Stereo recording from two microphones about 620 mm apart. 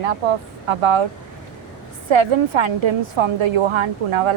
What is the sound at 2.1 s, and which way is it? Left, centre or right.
Speech, right.